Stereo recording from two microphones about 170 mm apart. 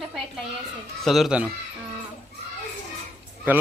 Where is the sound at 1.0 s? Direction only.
Centre (ahead or behind).